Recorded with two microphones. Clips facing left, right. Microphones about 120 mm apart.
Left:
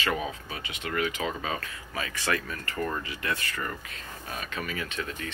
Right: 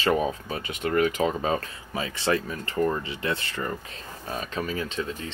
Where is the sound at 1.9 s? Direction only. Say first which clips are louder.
Right 5 dB; 25° right (ahead or behind).